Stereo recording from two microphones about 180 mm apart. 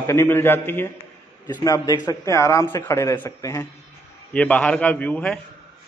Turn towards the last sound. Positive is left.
turn(degrees=5)  # may be behind; listen again after turning